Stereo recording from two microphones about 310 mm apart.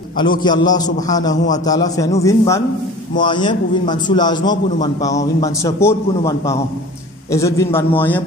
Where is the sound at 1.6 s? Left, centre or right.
Centre.